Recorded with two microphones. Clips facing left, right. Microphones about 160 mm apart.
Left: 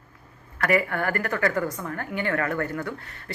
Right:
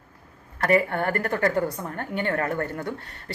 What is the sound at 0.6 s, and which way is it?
A woman's voice, 25° right (ahead or behind).